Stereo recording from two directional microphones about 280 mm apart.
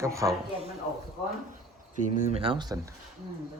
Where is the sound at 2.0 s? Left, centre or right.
Centre.